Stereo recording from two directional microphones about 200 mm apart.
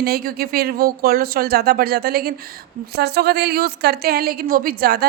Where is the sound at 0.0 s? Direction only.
50° right (ahead or behind).